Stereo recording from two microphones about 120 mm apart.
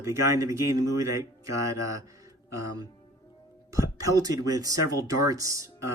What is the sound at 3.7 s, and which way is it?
Speech, 25° right (ahead or behind).